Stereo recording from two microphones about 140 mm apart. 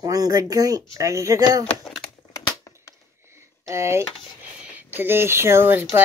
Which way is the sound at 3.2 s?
20° right (ahead or behind).